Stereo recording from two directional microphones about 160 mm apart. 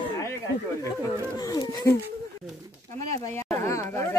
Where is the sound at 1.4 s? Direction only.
20° left (ahead or behind).